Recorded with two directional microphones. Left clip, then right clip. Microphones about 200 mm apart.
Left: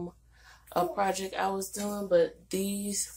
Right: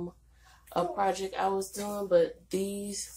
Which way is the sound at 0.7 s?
25° left (ahead or behind).